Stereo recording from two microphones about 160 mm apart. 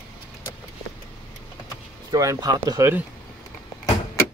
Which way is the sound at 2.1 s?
20° right (ahead or behind).